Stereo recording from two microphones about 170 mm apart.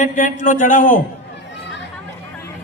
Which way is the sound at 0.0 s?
50° left (ahead or behind).